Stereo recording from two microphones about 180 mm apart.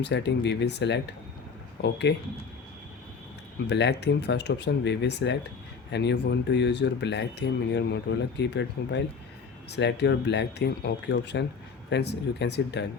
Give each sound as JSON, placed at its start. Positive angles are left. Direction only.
{"t": 0.0, "sound": "speech", "side_deg": 70}
{"t": 3.7, "sound": "speech", "side_deg": 70}